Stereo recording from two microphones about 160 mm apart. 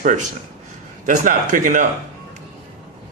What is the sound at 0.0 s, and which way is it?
A man's voice, 50° right (ahead or behind).